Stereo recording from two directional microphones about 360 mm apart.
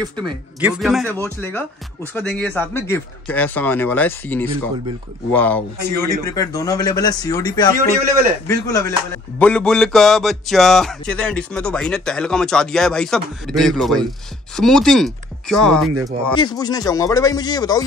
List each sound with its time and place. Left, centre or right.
0.0 s music: centre
5.9 s speech: centre
7.8 s a man's voice: right
8.5 s speech: centre
9.4 s music: centre
16.3 s speech: centre